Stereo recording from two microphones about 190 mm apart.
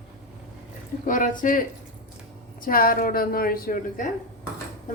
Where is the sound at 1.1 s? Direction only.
45° left (ahead or behind).